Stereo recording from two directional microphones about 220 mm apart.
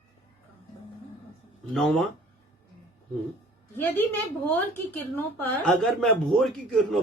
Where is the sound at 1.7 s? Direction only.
Centre (ahead or behind).